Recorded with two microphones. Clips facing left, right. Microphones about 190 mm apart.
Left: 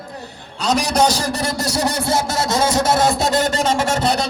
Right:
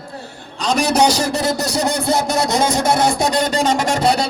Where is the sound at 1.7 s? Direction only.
20° right (ahead or behind).